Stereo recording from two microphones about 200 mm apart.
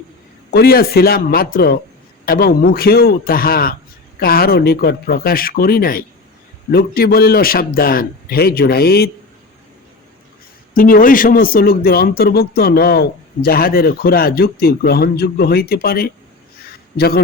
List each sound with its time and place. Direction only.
0.5 s speech: 50° left (ahead or behind)
10.8 s speech: 45° left (ahead or behind)